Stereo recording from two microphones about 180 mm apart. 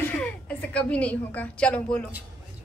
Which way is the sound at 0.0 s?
5° left (ahead or behind).